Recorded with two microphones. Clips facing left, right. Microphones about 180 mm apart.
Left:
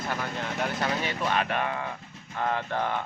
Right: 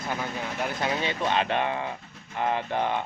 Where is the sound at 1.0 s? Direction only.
25° right (ahead or behind).